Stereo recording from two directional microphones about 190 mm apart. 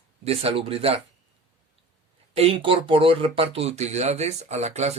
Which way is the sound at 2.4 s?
30° right (ahead or behind).